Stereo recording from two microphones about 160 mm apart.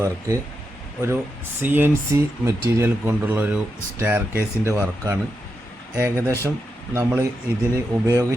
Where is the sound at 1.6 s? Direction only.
15° right (ahead or behind).